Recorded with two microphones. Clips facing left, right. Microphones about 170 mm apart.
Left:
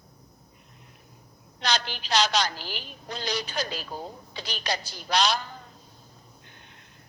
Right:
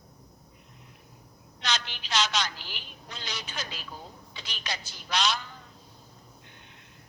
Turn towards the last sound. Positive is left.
turn(degrees=40)  # may be behind; listen again after turning